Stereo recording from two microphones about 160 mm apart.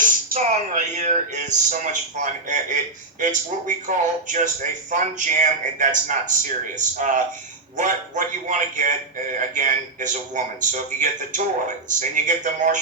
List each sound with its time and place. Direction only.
0.0 s a man's voice: 55° right (ahead or behind)
7.8 s a man's voice: 55° right (ahead or behind)